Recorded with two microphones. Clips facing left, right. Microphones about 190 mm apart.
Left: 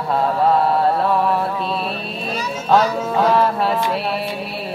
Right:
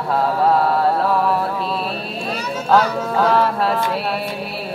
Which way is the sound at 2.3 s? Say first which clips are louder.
Even; centre (ahead or behind).